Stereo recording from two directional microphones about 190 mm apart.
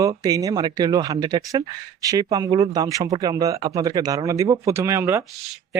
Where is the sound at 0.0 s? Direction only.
20° right (ahead or behind).